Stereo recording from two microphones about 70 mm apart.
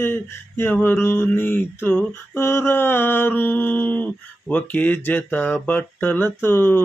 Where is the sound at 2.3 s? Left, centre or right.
Left.